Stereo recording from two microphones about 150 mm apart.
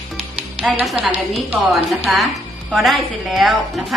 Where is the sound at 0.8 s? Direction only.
5° right (ahead or behind).